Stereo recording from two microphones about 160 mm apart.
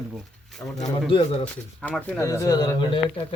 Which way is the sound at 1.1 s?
30° left (ahead or behind).